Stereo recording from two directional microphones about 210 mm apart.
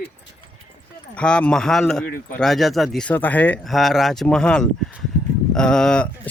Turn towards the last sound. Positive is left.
turn(degrees=5)  # may be behind; listen again after turning